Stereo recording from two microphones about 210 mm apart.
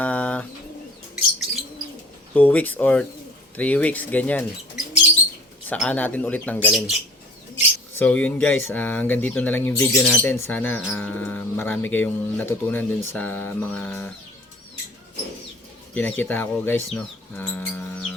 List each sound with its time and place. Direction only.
0.0 s bird: 5° left (ahead or behind)
2.3 s speech: 5° left (ahead or behind)
5.6 s speech: 5° left (ahead or behind)
7.9 s speech: 5° left (ahead or behind)
16.0 s speech: 10° left (ahead or behind)